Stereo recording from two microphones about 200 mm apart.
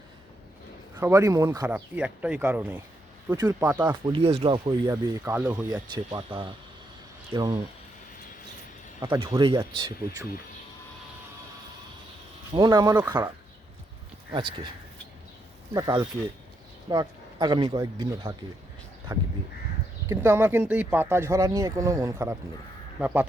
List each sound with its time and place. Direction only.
0.9 s speech: 15° right (ahead or behind)
4.0 s speech: 25° right (ahead or behind)
5.2 s speech: 10° right (ahead or behind)
5.9 s speech: 25° right (ahead or behind)
9.0 s speech: 20° right (ahead or behind)
12.5 s speech: 20° right (ahead or behind)
14.3 s speech: 20° right (ahead or behind)
15.7 s speech: 20° right (ahead or behind)
20.1 s speech: 10° right (ahead or behind)